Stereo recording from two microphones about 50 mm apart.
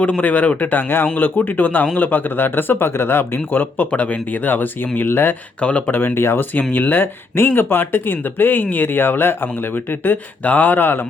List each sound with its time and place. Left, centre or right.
0.0 s speech: left
3.9 s speech: left
5.5 s speech: left
5.9 s speech: left
6.5 s speech: left
10.4 s speech: left